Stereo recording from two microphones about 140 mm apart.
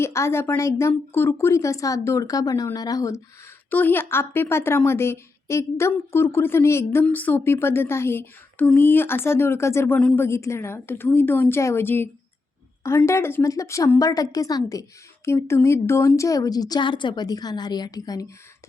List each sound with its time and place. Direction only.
0.0 s a woman's voice: 20° left (ahead or behind)
3.7 s a woman's voice: 15° left (ahead or behind)